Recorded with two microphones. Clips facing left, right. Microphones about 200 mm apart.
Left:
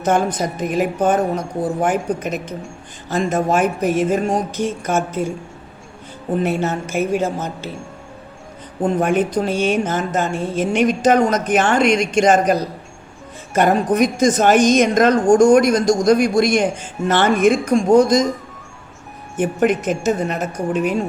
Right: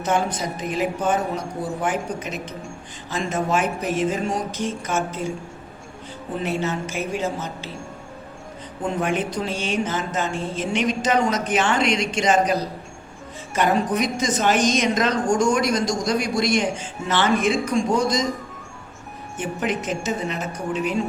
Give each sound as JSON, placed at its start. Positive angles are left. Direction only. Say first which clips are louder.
{"t": 0.0, "sound": "speech", "louder": "left 5 dB", "side_deg": 50}
{"t": 6.4, "sound": "speech", "louder": "left 3 dB", "side_deg": 50}
{"t": 8.8, "sound": "speech", "louder": "left 7 dB", "side_deg": 50}
{"t": 19.4, "sound": "speech", "louder": "left 8 dB", "side_deg": 50}